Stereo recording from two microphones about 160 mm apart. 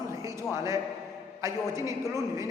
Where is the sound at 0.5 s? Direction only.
20° right (ahead or behind).